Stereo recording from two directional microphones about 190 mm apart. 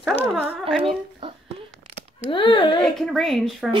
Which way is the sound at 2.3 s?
25° left (ahead or behind).